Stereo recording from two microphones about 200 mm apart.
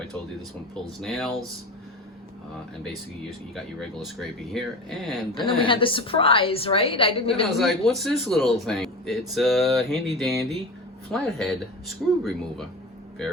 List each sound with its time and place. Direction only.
1.0 s speech: centre (ahead or behind)
2.8 s speech: centre (ahead or behind)
5.3 s a woman's voice: 25° left (ahead or behind)
7.4 s speech: centre (ahead or behind)